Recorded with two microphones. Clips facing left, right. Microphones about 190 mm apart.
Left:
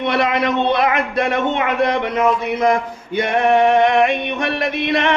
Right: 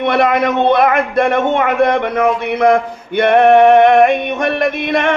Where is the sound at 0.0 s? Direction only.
50° right (ahead or behind).